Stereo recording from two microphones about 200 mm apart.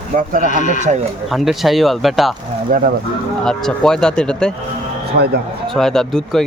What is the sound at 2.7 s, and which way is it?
Speech, 45° right (ahead or behind).